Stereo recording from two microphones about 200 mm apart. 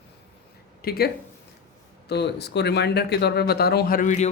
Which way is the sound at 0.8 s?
50° left (ahead or behind).